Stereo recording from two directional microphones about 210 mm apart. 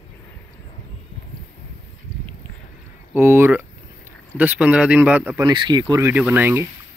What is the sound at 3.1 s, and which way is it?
Speech, 10° right (ahead or behind).